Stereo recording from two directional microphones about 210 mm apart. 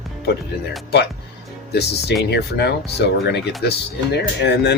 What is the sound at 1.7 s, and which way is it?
Speech, 50° left (ahead or behind).